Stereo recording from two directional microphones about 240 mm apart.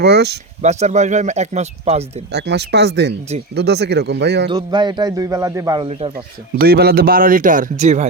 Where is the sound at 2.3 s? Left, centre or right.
Right.